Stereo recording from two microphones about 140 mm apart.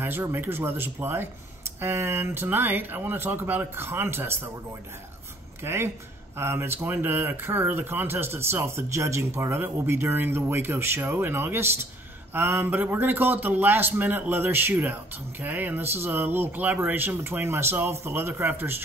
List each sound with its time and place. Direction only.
0.0 s speech: 15° right (ahead or behind)
5.6 s speech: 15° right (ahead or behind)